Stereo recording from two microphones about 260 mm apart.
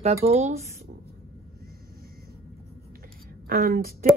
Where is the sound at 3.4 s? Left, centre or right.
Right.